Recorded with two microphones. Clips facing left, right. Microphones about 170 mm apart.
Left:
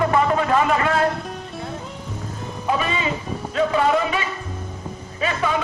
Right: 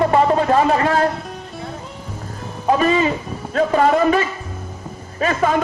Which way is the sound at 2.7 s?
45° right (ahead or behind).